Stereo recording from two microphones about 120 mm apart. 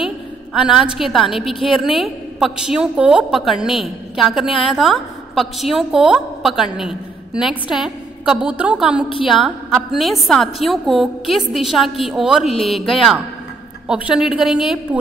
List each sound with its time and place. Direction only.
0.6 s a woman's voice: 5° right (ahead or behind)